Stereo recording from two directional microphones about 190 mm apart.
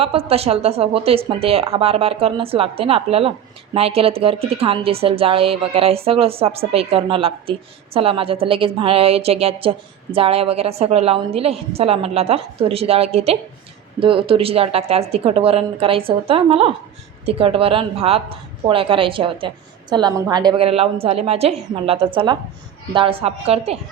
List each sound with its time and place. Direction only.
0.0 s a woman's voice: 30° right (ahead or behind)